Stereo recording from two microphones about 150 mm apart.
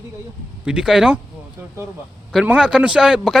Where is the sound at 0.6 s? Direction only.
5° right (ahead or behind).